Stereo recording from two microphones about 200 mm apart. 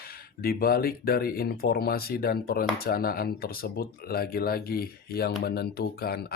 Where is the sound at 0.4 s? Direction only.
45° left (ahead or behind).